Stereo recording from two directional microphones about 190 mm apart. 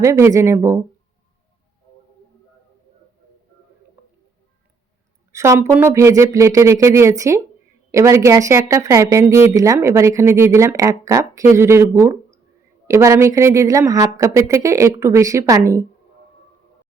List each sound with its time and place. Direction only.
0.0 s speech: 15° right (ahead or behind)
5.3 s a woman's voice: 15° right (ahead or behind)